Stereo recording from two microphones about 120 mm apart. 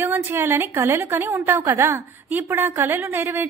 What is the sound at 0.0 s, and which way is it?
A woman's voice, 20° right (ahead or behind).